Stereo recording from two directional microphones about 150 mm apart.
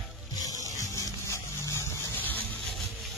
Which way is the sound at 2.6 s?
Centre (ahead or behind).